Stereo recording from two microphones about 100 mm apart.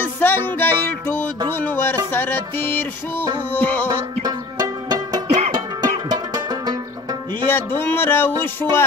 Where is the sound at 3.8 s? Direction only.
40° right (ahead or behind).